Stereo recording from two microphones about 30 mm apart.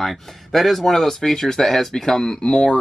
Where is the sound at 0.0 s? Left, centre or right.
Centre.